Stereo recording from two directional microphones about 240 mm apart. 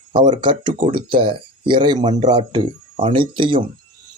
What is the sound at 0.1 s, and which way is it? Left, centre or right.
Speech, centre.